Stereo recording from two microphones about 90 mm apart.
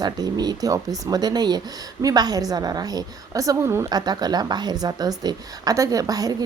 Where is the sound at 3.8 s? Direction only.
50° right (ahead or behind).